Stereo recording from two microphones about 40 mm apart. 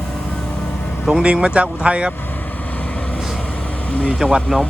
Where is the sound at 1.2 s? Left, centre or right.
Right.